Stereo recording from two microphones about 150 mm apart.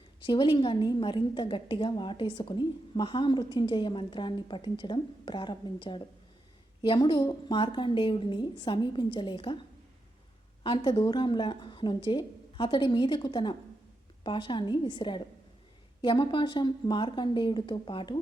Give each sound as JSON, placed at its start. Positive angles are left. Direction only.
{"t": 0.2, "sound": "a woman's voice", "side_deg": 30}
{"t": 10.6, "sound": "a woman's voice", "side_deg": 35}